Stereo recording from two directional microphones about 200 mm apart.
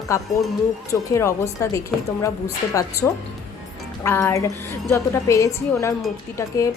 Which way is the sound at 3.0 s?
5° left (ahead or behind).